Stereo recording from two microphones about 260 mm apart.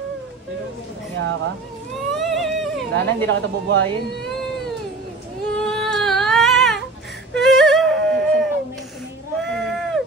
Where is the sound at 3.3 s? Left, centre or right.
Right.